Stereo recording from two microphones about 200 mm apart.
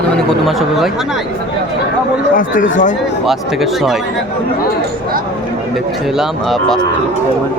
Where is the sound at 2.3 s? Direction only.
40° left (ahead or behind).